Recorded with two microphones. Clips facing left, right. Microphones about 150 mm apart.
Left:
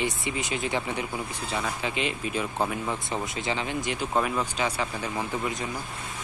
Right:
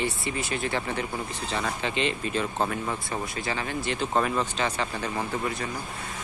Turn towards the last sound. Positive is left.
turn(degrees=15)  # may be behind; listen again after turning